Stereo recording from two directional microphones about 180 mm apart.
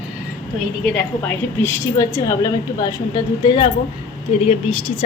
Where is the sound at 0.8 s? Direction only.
10° left (ahead or behind).